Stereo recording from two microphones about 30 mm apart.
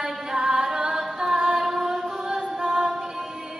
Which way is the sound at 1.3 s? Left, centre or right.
Right.